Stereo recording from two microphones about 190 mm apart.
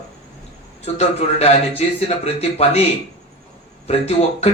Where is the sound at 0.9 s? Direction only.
30° left (ahead or behind).